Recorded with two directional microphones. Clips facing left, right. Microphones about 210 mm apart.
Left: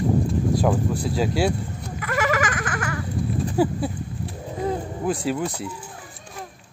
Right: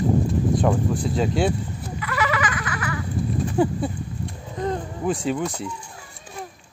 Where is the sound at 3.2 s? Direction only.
Centre (ahead or behind).